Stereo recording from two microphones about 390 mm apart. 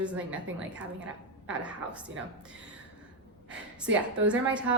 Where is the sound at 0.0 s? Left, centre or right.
Centre.